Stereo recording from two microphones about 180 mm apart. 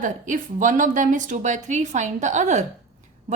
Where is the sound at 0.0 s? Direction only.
45° right (ahead or behind).